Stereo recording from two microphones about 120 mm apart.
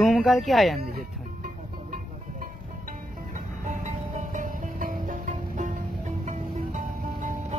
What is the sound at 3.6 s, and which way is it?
Music, 90° right.